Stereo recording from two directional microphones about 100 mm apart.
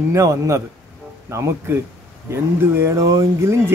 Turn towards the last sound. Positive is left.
turn(degrees=-30)  # may be behind; listen again after turning